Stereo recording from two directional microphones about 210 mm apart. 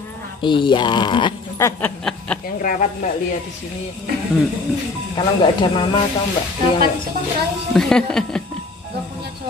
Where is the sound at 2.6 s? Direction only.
40° left (ahead or behind).